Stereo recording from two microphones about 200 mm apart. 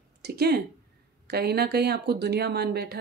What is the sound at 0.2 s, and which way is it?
Speech, 50° right (ahead or behind).